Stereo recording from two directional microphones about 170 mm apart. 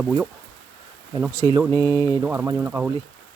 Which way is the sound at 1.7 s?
15° left (ahead or behind).